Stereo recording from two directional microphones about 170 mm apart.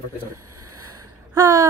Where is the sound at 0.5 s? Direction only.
20° right (ahead or behind).